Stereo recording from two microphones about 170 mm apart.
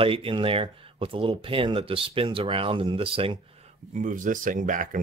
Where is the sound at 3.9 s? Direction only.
50° right (ahead or behind).